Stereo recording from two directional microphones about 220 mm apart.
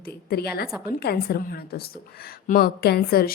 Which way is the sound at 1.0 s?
45° left (ahead or behind).